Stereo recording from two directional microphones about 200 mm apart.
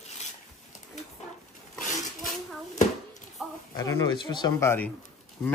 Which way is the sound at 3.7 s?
20° left (ahead or behind).